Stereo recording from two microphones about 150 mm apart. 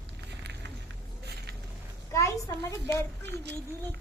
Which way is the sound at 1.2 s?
90° right.